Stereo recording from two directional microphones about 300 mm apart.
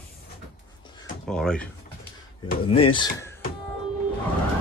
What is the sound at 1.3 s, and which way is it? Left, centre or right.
Speech, centre.